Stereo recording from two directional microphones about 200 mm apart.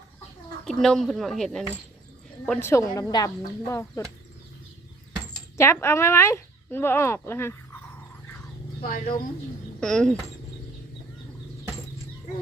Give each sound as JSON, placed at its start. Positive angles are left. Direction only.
{"t": 0.6, "sound": "speech", "side_deg": 0}
{"t": 5.3, "sound": "speech", "side_deg": 15}
{"t": 8.8, "sound": "speech", "side_deg": 45}
{"t": 9.8, "sound": "speech", "side_deg": 5}